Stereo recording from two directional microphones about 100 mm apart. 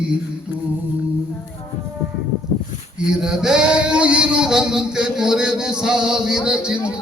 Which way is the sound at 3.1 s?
5° right (ahead or behind).